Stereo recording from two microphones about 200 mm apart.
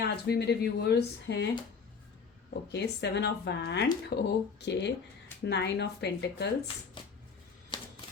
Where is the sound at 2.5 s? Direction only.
55° left (ahead or behind).